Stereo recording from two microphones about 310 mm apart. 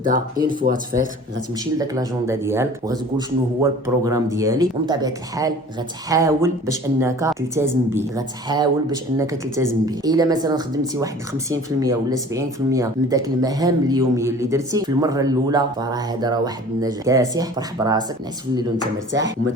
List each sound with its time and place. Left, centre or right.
0.6 s speech: right
1.8 s speech: centre
11.8 s speech: centre
18.8 s speech: right